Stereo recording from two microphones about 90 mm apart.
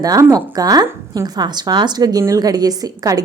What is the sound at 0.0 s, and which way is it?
A woman's voice, 40° right (ahead or behind).